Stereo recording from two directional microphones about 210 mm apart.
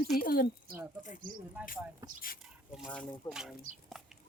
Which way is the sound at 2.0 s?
15° right (ahead or behind).